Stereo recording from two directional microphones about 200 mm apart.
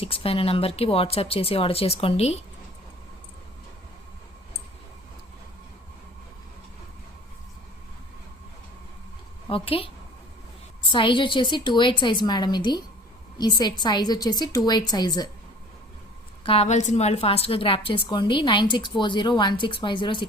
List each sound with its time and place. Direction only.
0.0 s a woman's voice: 30° left (ahead or behind)
9.5 s a woman's voice: 25° left (ahead or behind)
10.9 s a woman's voice: 25° left (ahead or behind)
16.4 s a woman's voice: 30° left (ahead or behind)